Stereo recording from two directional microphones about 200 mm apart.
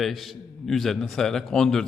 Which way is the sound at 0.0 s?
Centre (ahead or behind).